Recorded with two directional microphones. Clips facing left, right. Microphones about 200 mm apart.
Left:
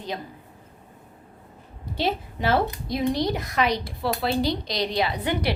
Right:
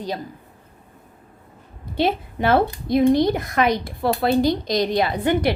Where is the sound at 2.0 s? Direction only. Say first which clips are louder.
Right 5 dB; 55° right (ahead or behind).